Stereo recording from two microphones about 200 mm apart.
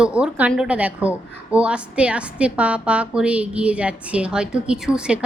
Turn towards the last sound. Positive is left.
turn(degrees=-5)  # may be behind; listen again after turning